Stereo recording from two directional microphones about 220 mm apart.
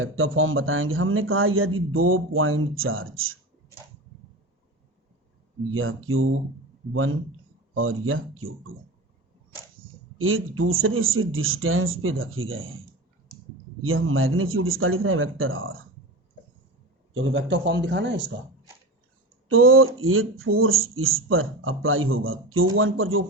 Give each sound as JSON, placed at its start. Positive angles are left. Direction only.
{"t": 0.0, "sound": "speech", "side_deg": -65}
{"t": 5.7, "sound": "speech", "side_deg": -65}
{"t": 10.2, "sound": "speech", "side_deg": -65}
{"t": 13.8, "sound": "speech", "side_deg": -65}
{"t": 17.2, "sound": "a man's voice", "side_deg": -55}
{"t": 19.5, "sound": "a man's voice", "side_deg": -70}